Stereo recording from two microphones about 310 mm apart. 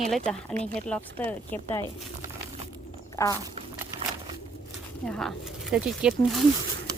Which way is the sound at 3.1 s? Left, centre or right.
Centre.